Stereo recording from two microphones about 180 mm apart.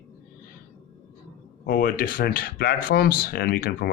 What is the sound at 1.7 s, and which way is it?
Speech, 55° left (ahead or behind).